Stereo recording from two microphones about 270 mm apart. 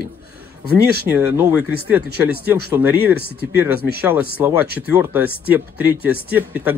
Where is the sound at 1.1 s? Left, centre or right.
Centre.